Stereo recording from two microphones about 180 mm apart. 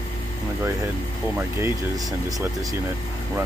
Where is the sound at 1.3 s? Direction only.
15° right (ahead or behind).